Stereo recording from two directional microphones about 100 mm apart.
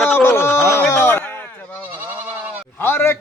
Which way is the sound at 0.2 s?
25° left (ahead or behind).